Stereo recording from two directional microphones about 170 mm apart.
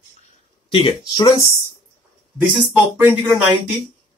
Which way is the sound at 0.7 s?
30° left (ahead or behind).